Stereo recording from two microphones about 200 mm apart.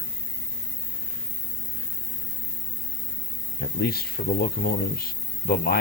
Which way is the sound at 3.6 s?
50° left (ahead or behind).